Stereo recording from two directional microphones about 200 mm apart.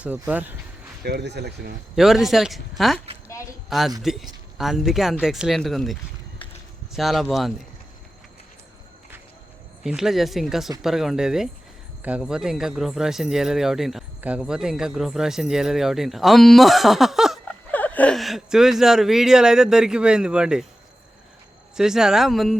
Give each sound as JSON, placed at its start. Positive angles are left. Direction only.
{"t": 0.0, "sound": "speech", "side_deg": -10}
{"t": 1.0, "sound": "speech", "side_deg": -55}
{"t": 2.0, "sound": "speech", "side_deg": 0}
{"t": 9.8, "sound": "speech", "side_deg": 0}
{"t": 21.8, "sound": "speech", "side_deg": -5}